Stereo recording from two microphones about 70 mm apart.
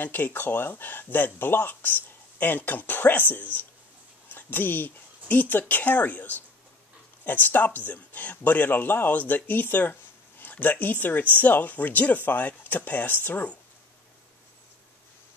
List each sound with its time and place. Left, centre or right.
0.0 s speech: left